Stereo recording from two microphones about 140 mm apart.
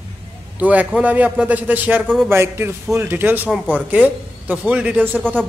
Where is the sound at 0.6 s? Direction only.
10° right (ahead or behind).